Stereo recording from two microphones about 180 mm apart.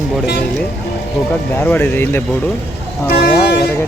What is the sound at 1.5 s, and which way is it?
Speech, 10° left (ahead or behind).